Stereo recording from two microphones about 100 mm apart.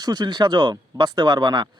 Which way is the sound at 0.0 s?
45° right (ahead or behind).